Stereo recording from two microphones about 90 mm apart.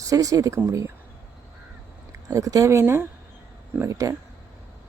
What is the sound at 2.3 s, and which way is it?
Speech, 40° right (ahead or behind).